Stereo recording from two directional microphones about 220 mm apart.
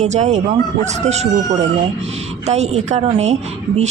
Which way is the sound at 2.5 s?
30° right (ahead or behind).